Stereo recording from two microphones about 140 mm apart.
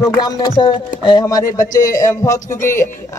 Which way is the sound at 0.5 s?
40° left (ahead or behind).